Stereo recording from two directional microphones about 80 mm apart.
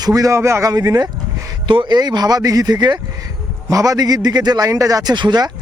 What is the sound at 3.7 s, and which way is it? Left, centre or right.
A man's voice, right.